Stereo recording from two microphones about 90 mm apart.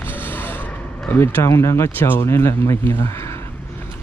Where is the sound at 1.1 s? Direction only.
25° left (ahead or behind).